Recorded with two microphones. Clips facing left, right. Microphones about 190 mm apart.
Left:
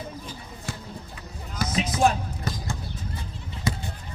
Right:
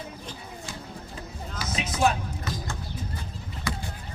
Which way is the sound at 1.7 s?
35° left (ahead or behind).